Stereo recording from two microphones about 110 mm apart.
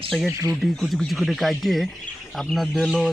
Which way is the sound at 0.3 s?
30° right (ahead or behind).